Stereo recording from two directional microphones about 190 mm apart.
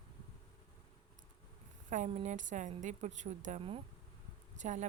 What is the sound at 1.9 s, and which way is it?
Speech, 40° right (ahead or behind).